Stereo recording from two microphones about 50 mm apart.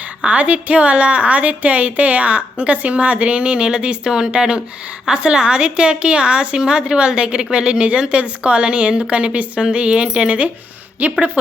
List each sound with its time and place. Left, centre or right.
0.3 s a woman's voice: right
11.0 s a woman's voice: right